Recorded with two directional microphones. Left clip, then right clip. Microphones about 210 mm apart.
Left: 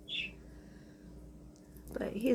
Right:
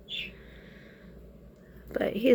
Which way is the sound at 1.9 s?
15° right (ahead or behind).